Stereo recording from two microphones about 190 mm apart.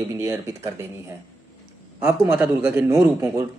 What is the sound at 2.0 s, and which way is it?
Speech, 10° right (ahead or behind).